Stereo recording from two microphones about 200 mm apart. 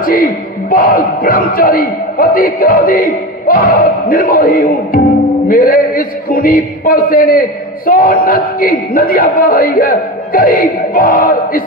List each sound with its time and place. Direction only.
0.0 s speech: 45° left (ahead or behind)